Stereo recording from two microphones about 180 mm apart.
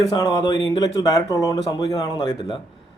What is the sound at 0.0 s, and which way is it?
Speech, 20° left (ahead or behind).